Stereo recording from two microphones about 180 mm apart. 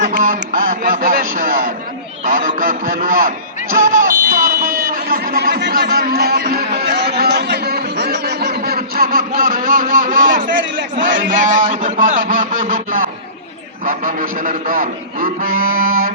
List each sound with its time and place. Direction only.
0.7 s a man's voice: 50° right (ahead or behind)
1.4 s a sound: 50° right (ahead or behind)
11.3 s a man's voice: 45° right (ahead or behind)